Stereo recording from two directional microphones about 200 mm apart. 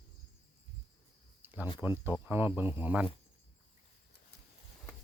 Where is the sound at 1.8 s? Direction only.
10° right (ahead or behind).